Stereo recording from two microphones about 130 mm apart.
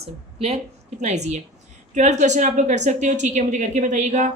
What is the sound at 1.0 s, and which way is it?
A woman's voice, 60° right (ahead or behind).